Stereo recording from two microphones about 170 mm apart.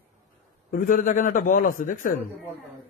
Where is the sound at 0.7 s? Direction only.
55° left (ahead or behind).